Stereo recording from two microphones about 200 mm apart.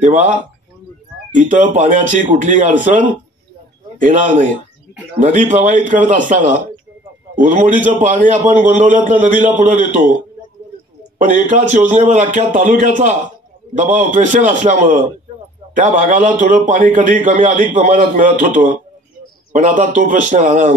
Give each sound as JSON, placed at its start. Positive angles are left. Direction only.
{"t": 0.0, "sound": "a man's voice", "side_deg": -40}
{"t": 1.5, "sound": "a man's voice", "side_deg": -40}
{"t": 11.1, "sound": "a man's voice", "side_deg": -40}